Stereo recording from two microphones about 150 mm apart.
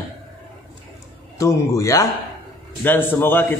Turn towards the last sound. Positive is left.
turn(degrees=15)  # may be behind; listen again after turning